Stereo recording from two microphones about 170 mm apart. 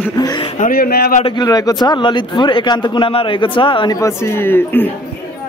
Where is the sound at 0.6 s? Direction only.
60° left (ahead or behind).